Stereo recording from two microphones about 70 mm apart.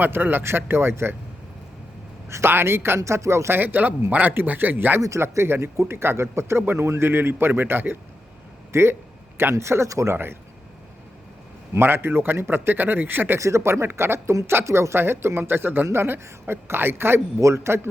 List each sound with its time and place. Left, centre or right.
0.0 s speech: right
2.3 s speech: right
3.6 s a man's voice: right
4.9 s speech: right
11.7 s speech: right
13.4 s speech: right